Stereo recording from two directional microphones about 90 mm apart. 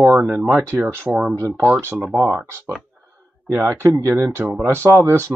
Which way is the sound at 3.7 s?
30° right (ahead or behind).